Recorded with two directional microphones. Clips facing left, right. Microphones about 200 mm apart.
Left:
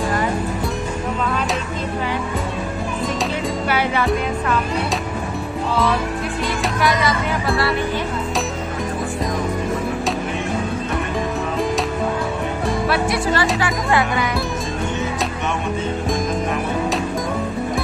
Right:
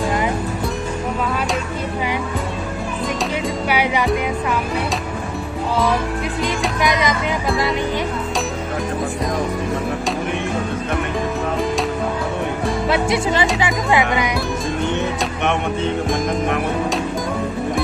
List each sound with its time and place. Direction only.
3.6 s music: 15° right (ahead or behind)
6.4 s music: 15° right (ahead or behind)
12.8 s music: 20° right (ahead or behind)
13.6 s speech: 20° right (ahead or behind)